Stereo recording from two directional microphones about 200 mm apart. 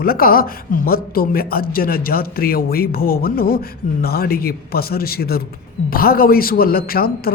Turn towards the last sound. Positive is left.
turn(degrees=50)  # may be behind; listen again after turning